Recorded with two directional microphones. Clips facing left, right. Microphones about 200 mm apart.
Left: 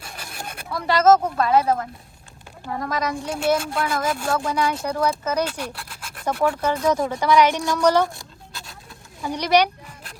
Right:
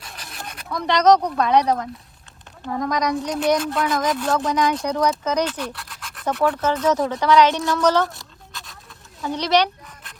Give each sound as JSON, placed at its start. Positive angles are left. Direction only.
{"t": 0.0, "sound": "zipper", "side_deg": 50}
{"t": 0.7, "sound": "a woman's voice", "side_deg": 5}
{"t": 9.2, "sound": "a woman's voice", "side_deg": 10}